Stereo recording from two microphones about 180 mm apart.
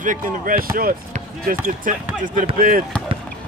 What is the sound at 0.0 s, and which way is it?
Speech, 50° right (ahead or behind).